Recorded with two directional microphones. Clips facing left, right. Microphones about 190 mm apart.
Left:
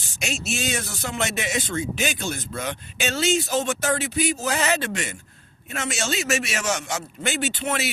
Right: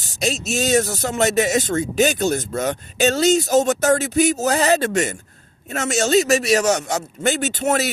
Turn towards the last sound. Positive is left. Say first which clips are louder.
# right 6 dB
turn(degrees=-45)  # may be behind; listen again after turning